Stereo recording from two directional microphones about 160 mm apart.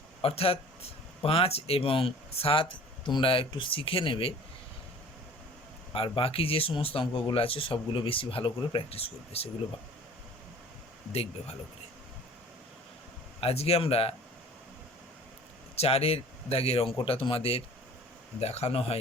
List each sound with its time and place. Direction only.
0.2 s speech: 35° left (ahead or behind)
5.9 s speech: 35° left (ahead or behind)
11.1 s speech: 40° left (ahead or behind)
13.4 s speech: 40° left (ahead or behind)
15.7 s speech: 40° left (ahead or behind)